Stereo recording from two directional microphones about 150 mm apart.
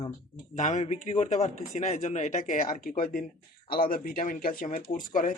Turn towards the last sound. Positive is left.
turn(degrees=60)  # may be behind; listen again after turning